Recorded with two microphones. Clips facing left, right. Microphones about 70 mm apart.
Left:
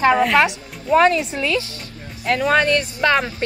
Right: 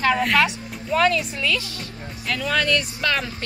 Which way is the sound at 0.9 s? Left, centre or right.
Left.